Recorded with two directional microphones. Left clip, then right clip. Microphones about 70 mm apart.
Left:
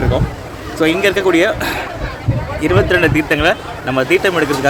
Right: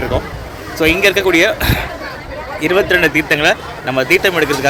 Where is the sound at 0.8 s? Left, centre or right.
Left.